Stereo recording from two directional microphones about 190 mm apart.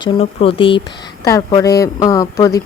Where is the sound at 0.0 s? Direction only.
30° left (ahead or behind).